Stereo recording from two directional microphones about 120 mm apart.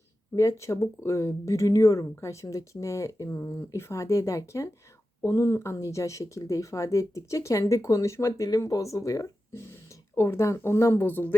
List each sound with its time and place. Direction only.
0.3 s speech: 25° left (ahead or behind)